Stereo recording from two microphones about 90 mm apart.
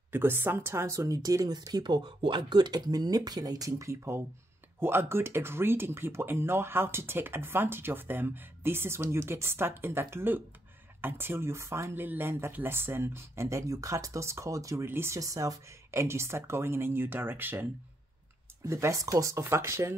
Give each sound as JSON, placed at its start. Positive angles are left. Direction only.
{"t": 0.1, "sound": "speech", "side_deg": -25}
{"t": 14.9, "sound": "speech", "side_deg": -25}
{"t": 15.1, "sound": "speech", "side_deg": -40}
{"t": 18.7, "sound": "speech", "side_deg": -35}